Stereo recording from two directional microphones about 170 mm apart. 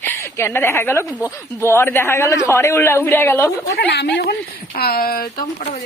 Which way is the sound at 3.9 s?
75° left (ahead or behind).